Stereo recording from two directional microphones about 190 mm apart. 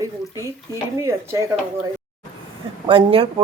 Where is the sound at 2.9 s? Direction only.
30° right (ahead or behind).